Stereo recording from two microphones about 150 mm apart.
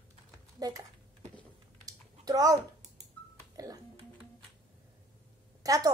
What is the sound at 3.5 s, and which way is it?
Music, 25° right (ahead or behind).